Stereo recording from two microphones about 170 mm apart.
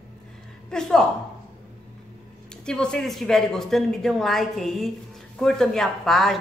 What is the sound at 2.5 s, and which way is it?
A woman's voice, 5° left (ahead or behind).